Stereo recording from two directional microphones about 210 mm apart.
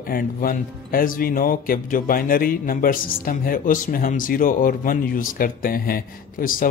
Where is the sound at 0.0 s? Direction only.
45° left (ahead or behind).